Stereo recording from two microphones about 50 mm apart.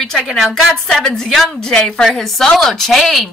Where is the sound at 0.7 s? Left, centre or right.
Centre.